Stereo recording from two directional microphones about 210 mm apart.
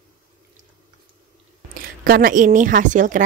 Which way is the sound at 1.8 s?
40° right (ahead or behind).